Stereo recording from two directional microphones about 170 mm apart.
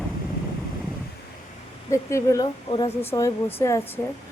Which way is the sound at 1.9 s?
15° left (ahead or behind).